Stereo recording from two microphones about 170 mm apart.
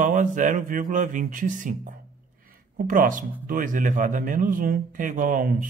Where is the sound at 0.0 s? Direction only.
50° right (ahead or behind).